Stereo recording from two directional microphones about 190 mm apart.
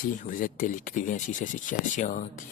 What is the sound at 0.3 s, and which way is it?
Speech, 45° left (ahead or behind).